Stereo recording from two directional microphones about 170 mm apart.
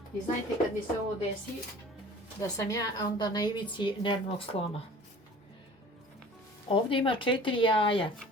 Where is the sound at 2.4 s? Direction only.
20° left (ahead or behind).